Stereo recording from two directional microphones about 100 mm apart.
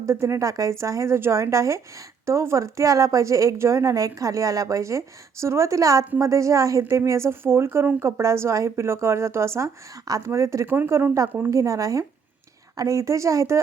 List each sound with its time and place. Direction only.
0.0 s a woman's voice: 30° right (ahead or behind)
11.3 s a woman's voice: 15° right (ahead or behind)
11.5 s speech: 30° right (ahead or behind)